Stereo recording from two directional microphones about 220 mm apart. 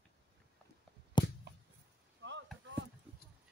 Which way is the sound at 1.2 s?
20° left (ahead or behind).